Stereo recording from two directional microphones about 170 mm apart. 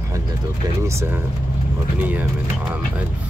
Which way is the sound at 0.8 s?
15° right (ahead or behind).